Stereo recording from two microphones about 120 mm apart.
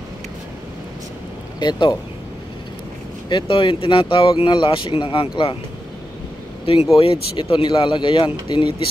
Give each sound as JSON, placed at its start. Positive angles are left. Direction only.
{"t": 1.6, "sound": "speech", "side_deg": 35}
{"t": 3.3, "sound": "speech", "side_deg": 40}
{"t": 6.6, "sound": "speech", "side_deg": 50}